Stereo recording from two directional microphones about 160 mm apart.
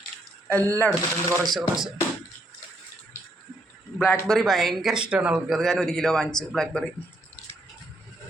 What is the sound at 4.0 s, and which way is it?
Speech, 15° left (ahead or behind).